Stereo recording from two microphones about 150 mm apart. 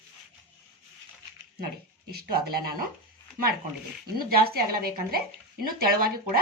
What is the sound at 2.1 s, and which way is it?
Speech, 90° right.